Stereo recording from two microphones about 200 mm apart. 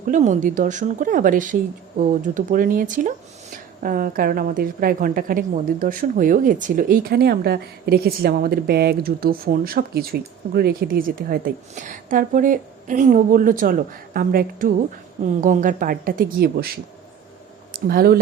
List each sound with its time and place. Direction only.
0.1 s a woman's voice: 40° right (ahead or behind)
17.7 s speech: 50° right (ahead or behind)